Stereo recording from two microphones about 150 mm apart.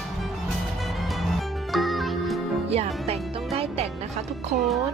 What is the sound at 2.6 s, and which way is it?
Music, 45° right (ahead or behind).